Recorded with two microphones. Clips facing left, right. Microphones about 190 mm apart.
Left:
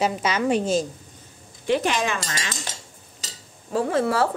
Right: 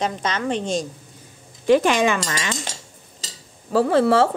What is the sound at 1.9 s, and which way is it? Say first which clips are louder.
Speech: right 6 dB; 90° right.